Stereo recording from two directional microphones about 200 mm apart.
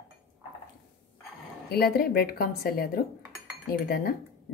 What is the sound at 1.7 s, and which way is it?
Speech, 50° left (ahead or behind).